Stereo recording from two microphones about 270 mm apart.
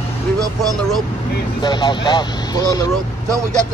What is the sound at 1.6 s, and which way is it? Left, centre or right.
Speech, centre.